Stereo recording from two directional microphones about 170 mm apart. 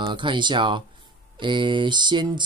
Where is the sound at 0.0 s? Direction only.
30° right (ahead or behind).